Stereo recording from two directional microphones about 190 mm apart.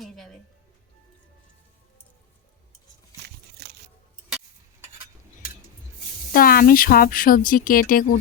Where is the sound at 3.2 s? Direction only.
60° right (ahead or behind).